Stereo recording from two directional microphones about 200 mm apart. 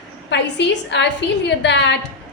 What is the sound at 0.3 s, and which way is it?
A woman's voice, 60° left (ahead or behind).